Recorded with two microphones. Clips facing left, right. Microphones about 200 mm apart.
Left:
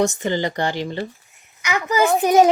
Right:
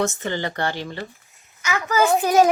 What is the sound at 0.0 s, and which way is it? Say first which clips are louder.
A woman's voice: left 4 dB; 15° left (ahead or behind).